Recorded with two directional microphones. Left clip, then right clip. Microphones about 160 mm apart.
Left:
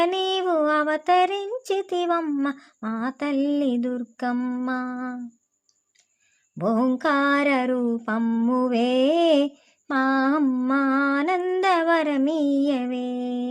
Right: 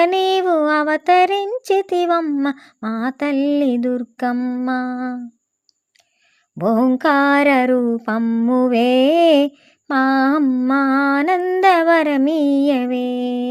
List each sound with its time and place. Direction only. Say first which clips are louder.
0.0 s a sound: right 7 dB; 30° right (ahead or behind)
2.4 s mantra: right 5 dB; 30° right (ahead or behind)
6.6 s mantra: right 6 dB; 30° right (ahead or behind)